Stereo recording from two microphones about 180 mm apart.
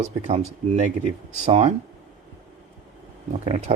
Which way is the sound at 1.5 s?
35° right (ahead or behind).